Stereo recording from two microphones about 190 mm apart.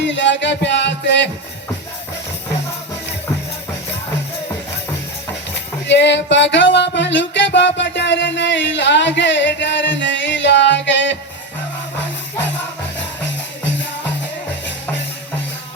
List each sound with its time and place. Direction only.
0.0 s music: 70° left (ahead or behind)
5.9 s music: 65° left (ahead or behind)